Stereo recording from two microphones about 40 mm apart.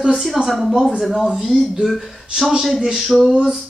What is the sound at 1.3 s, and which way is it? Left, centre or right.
Speech, centre.